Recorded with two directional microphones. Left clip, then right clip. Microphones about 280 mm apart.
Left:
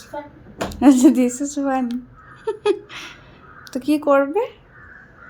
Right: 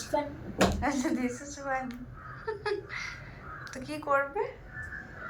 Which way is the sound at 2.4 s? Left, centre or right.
Left.